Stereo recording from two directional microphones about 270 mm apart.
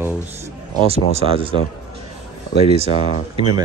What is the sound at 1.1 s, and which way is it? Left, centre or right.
Speech, centre.